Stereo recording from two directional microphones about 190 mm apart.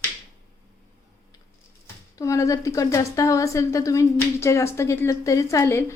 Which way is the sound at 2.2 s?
15° left (ahead or behind).